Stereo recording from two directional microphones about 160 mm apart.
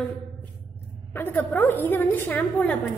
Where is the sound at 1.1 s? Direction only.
10° left (ahead or behind).